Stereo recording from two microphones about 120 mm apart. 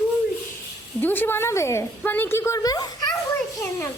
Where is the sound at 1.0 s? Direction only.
15° left (ahead or behind).